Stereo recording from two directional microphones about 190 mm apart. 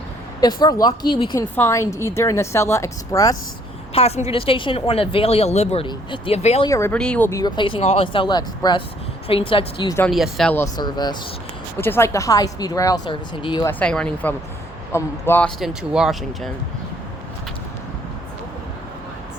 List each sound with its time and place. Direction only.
0.3 s speech: 20° left (ahead or behind)
1.5 s a woman's voice: 15° left (ahead or behind)
3.9 s a woman's voice: 30° left (ahead or behind)
6.7 s speech: 15° left (ahead or behind)
10.1 s speech: centre (ahead or behind)
10.8 s speech: 20° left (ahead or behind)
13.7 s a woman's voice: 5° left (ahead or behind)
15.6 s speech: 5° right (ahead or behind)